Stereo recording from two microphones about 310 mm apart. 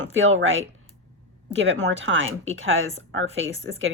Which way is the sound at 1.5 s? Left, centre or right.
Right.